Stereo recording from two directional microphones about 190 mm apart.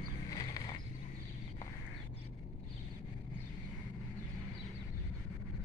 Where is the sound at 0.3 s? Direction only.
20° left (ahead or behind).